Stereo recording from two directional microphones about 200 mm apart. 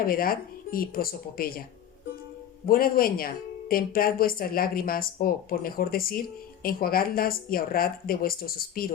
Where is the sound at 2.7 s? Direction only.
45° left (ahead or behind).